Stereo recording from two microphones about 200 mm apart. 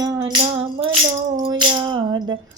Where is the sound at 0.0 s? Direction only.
20° right (ahead or behind).